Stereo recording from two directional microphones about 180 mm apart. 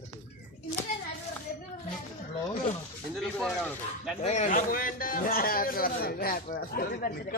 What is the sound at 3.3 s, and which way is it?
Speech, 5° right (ahead or behind).